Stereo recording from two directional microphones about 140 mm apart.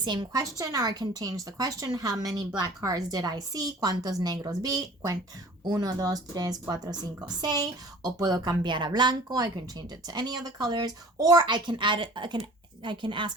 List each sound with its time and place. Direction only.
0.0 s a woman's voice: 30° right (ahead or behind)